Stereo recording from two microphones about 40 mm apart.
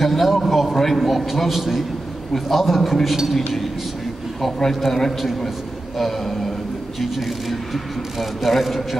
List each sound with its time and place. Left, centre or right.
0.0 s a man's voice: centre
4.6 s a man's voice: centre